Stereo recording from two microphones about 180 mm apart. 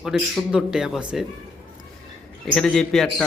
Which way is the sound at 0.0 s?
Centre (ahead or behind).